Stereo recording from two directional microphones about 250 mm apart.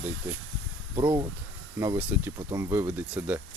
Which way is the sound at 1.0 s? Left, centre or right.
Centre.